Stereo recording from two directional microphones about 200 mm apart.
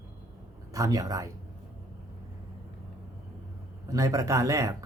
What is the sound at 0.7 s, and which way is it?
Speech, 15° right (ahead or behind).